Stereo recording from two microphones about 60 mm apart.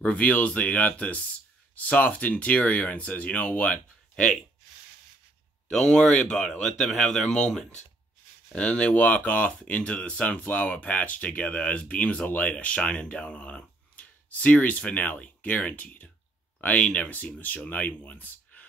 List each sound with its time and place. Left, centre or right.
0.0 s speech: left
5.7 s speech: centre
8.5 s speech: centre